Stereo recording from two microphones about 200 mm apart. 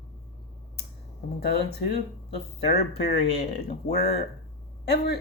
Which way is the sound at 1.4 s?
55° left (ahead or behind).